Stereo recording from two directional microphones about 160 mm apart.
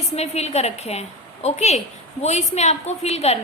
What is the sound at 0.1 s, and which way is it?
A woman's voice, 40° left (ahead or behind).